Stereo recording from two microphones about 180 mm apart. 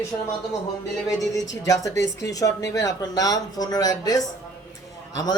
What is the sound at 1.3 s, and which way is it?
Speech, 20° left (ahead or behind).